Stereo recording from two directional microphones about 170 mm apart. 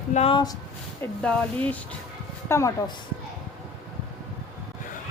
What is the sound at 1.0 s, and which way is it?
Speech, 5° left (ahead or behind).